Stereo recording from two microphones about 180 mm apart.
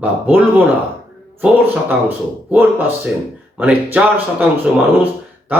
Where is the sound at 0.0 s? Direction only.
10° right (ahead or behind).